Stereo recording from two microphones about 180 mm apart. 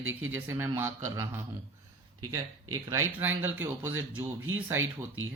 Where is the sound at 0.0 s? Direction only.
90° right.